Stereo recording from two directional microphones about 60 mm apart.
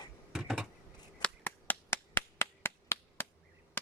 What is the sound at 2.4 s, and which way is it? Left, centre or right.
Chop, left.